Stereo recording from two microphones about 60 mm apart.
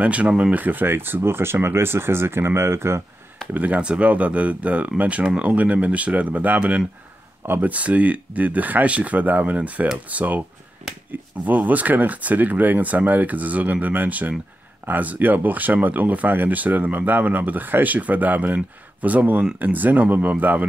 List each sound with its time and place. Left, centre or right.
0.0 s speech: right
3.5 s speech: right
7.4 s speech: right
7.7 s speech: right
11.4 s speech: right